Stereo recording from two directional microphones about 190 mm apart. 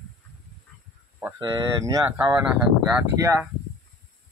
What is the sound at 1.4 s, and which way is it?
Speech, 20° right (ahead or behind).